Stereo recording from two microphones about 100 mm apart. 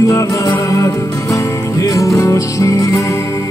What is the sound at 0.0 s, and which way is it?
Music, 35° left (ahead or behind).